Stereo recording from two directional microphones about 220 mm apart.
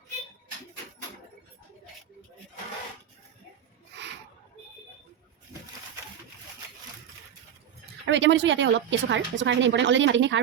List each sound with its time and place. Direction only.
8.0 s speech: 55° right (ahead or behind)